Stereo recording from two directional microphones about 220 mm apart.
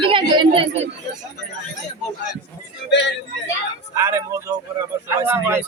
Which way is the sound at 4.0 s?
15° right (ahead or behind).